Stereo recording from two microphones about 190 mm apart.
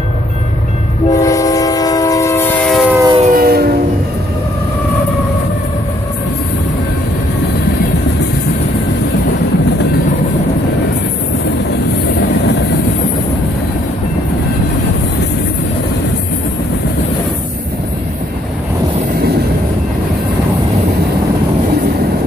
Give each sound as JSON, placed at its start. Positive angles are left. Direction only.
{"t": 1.1, "sound": "train", "side_deg": 15}
{"t": 2.9, "sound": "train", "side_deg": -15}
{"t": 3.3, "sound": "train", "side_deg": -55}